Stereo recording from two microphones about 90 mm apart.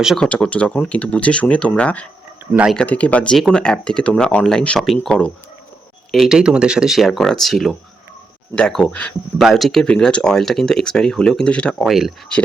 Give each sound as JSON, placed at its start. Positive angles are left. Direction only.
{"t": 0.2, "sound": "speech", "side_deg": 10}
{"t": 2.5, "sound": "speech", "side_deg": -10}
{"t": 2.7, "sound": "speech", "side_deg": 15}
{"t": 6.1, "sound": "speech", "side_deg": -5}
{"t": 9.4, "sound": "speech", "side_deg": 0}
{"t": 11.8, "sound": "speech", "side_deg": 0}